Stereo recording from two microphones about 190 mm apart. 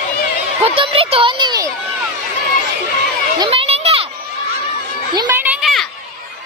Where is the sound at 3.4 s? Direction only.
30° right (ahead or behind).